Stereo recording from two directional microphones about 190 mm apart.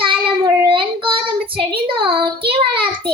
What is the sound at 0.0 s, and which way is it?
Child singing, 25° right (ahead or behind).